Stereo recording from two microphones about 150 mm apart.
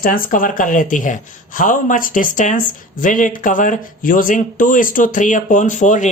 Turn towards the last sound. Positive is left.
turn(degrees=55)  # may be behind; listen again after turning